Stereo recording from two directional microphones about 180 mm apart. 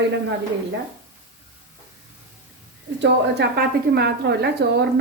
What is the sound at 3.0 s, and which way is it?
A woman's voice, 65° right (ahead or behind).